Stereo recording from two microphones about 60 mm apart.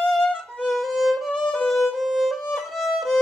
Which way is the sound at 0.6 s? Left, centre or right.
Centre.